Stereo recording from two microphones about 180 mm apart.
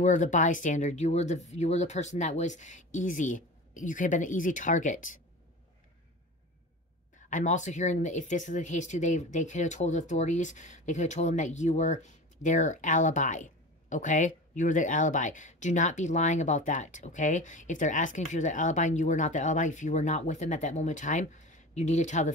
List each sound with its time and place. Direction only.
0.0 s speech: 45° left (ahead or behind)
7.2 s speech: 45° left (ahead or behind)